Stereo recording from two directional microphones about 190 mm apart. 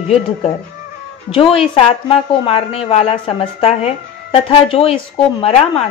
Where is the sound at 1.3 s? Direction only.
30° left (ahead or behind).